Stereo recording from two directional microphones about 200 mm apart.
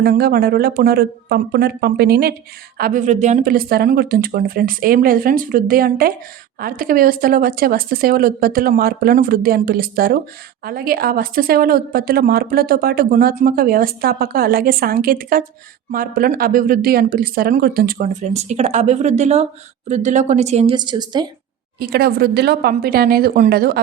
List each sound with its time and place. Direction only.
0.0 s speech: 50° right (ahead or behind); by 21.2 s 20° right (ahead or behind)
21.8 s speech: 50° right (ahead or behind)